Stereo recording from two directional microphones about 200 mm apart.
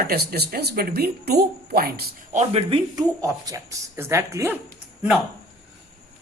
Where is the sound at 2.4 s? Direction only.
30° right (ahead or behind); by 4.5 s 15° right (ahead or behind).